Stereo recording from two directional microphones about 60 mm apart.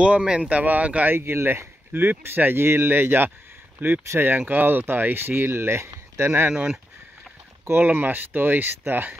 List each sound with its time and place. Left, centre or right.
0.0 s speech: centre
1.1 s speech: right